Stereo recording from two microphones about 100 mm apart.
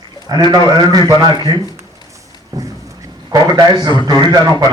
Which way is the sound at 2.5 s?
35° right (ahead or behind).